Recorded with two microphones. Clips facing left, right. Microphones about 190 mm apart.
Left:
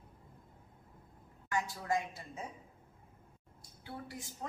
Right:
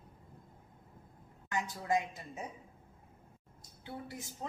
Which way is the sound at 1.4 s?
20° right (ahead or behind).